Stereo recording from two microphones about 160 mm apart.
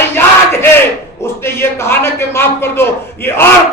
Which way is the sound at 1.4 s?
15° left (ahead or behind).